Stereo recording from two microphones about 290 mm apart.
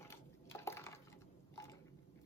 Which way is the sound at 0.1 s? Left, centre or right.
Centre.